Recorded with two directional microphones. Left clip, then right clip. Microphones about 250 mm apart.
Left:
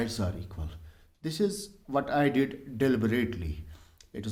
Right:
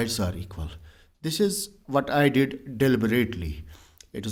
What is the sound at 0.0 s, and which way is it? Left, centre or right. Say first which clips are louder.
A man's voice: right 5 dB; right.